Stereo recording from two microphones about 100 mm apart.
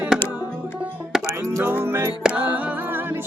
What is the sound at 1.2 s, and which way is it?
Music, 30° right (ahead or behind).